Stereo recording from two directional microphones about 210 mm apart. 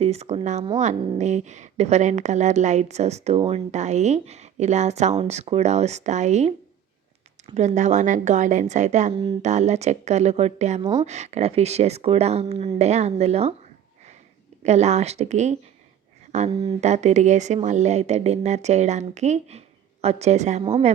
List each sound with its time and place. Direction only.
0.0 s a woman's voice: 30° right (ahead or behind)
14.6 s a woman's voice: 30° right (ahead or behind)